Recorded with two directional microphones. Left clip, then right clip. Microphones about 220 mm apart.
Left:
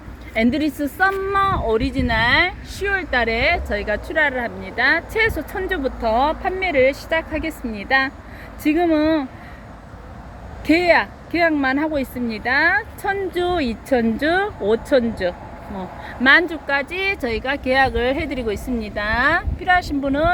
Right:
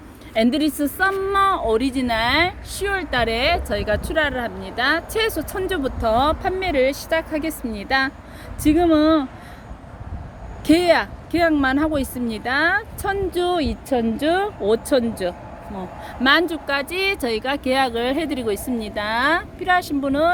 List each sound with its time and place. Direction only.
0.3 s a woman's voice: 15° right (ahead or behind)
10.7 s a woman's voice: 15° right (ahead or behind)